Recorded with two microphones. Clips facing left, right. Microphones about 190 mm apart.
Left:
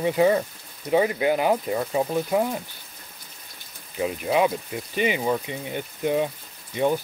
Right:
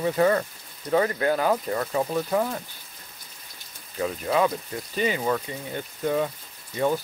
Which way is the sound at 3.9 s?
10° left (ahead or behind).